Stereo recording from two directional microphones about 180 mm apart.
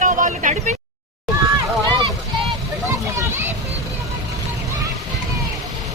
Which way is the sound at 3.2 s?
10° right (ahead or behind).